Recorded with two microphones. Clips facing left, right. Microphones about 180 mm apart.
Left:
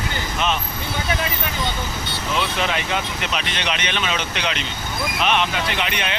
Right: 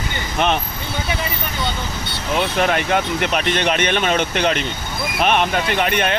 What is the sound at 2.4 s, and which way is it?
Speech, 55° right (ahead or behind).